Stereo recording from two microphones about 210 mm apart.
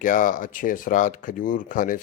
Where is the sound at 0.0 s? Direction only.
40° left (ahead or behind).